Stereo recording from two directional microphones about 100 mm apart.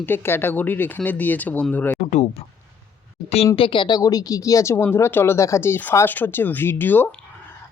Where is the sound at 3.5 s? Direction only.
60° left (ahead or behind).